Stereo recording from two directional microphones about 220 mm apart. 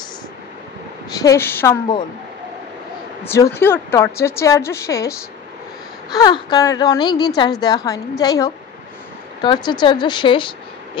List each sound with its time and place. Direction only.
1.1 s a woman's voice: 15° left (ahead or behind)
3.3 s a woman's voice: 15° left (ahead or behind)
6.1 s a woman's voice: 20° left (ahead or behind)